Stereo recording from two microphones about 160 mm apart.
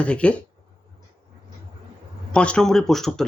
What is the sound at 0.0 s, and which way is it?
Speech, 5° left (ahead or behind).